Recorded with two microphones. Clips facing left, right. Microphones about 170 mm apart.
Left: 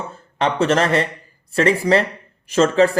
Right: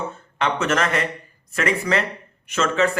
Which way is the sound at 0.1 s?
35° left (ahead or behind).